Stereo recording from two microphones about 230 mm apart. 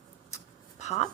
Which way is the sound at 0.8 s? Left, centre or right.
Left.